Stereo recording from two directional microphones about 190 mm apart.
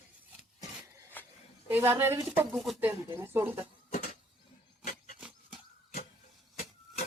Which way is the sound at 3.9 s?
40° left (ahead or behind).